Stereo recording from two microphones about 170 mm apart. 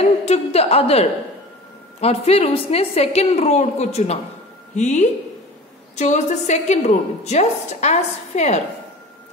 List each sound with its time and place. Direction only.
0.0 s a woman's voice: 40° left (ahead or behind)